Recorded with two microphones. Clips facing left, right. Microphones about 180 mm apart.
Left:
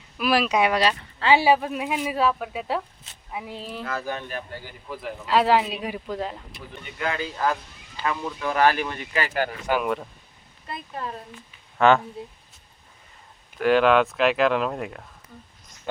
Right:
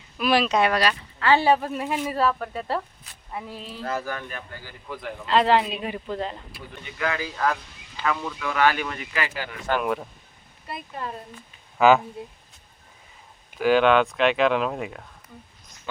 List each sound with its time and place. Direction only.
0.2 s speech: 5° left (ahead or behind)
0.8 s speech: 25° left (ahead or behind)
1.3 s a woman's voice: 5° left (ahead or behind)
4.0 s speech: 25° left (ahead or behind)
4.9 s a woman's voice: 5° left (ahead or behind)
7.0 s speech: 25° left (ahead or behind)
8.4 s speech: 35° left (ahead or behind)
9.6 s a woman's voice: centre (ahead or behind)
13.6 s a woman's voice: centre (ahead or behind)